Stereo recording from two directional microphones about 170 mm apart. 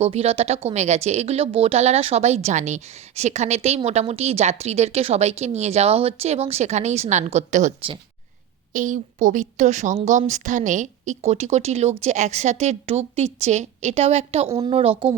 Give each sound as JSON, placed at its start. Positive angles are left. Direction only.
{"t": 0.0, "sound": "a woman's voice", "side_deg": -35}